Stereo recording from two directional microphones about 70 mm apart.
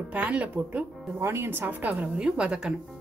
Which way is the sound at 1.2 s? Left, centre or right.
Right.